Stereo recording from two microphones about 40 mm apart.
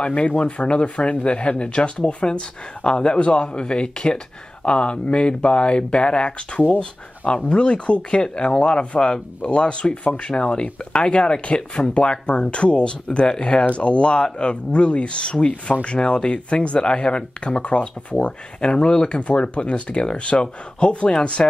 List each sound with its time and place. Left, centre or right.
0.0 s speech: left